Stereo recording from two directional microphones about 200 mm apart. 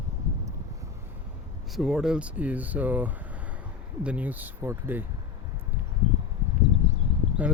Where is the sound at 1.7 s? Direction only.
Centre (ahead or behind).